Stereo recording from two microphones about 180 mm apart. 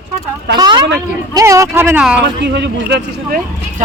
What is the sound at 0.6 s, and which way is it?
A woman's voice, 25° right (ahead or behind).